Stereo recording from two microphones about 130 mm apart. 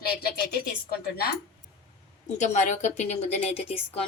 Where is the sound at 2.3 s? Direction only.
70° left (ahead or behind); by 4.0 s 55° left (ahead or behind).